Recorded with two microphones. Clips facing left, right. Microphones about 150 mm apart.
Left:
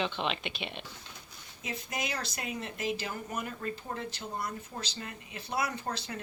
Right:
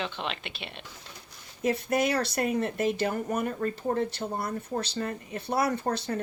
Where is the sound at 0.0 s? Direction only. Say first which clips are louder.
Left 1 dB; centre (ahead or behind).